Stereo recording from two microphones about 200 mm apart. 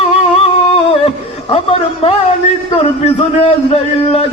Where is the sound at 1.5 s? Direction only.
30° left (ahead or behind).